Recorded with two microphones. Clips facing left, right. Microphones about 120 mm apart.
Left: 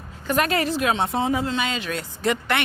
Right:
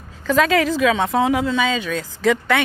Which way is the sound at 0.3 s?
90° right.